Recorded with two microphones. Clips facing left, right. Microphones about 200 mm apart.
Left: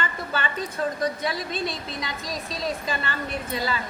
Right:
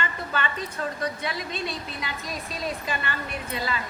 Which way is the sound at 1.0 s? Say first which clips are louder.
Left 3 dB; 35° left (ahead or behind).